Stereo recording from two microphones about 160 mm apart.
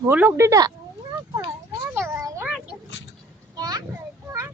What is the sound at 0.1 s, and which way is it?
Speech, 15° right (ahead or behind).